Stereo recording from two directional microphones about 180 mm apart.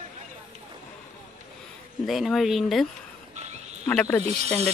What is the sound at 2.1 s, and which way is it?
Speech, centre (ahead or behind).